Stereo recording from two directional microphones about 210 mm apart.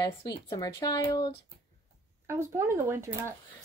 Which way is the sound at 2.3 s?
10° right (ahead or behind).